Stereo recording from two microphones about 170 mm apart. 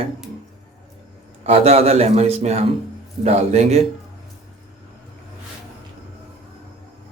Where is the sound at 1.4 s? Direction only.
35° right (ahead or behind).